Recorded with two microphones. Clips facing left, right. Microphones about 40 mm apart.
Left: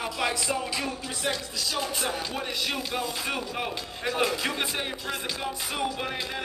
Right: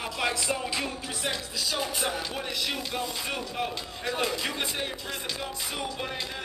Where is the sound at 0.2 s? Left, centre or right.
Centre.